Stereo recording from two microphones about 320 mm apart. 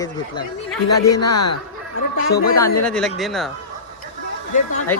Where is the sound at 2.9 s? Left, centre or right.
Centre.